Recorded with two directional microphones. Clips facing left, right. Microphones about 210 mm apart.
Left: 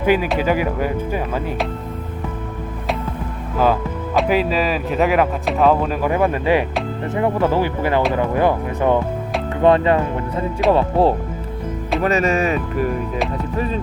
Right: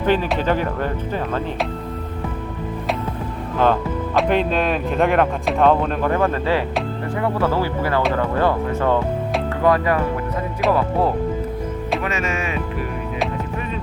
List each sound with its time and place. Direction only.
0.0 s speech: 10° left (ahead or behind)
3.6 s speech: 5° left (ahead or behind); by 12.9 s 40° left (ahead or behind)